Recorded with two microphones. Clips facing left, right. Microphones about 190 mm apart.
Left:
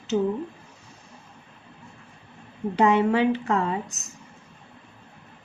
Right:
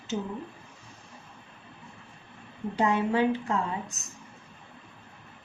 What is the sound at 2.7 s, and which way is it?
A woman's voice, 80° left.